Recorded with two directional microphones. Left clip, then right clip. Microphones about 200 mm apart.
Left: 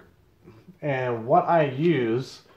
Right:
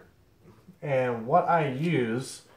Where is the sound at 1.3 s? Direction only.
40° left (ahead or behind).